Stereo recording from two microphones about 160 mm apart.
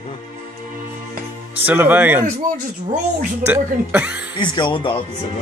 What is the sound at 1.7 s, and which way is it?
Speech, 10° right (ahead or behind).